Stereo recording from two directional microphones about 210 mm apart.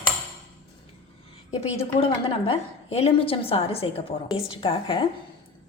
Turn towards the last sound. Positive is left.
turn(degrees=25)  # may be behind; listen again after turning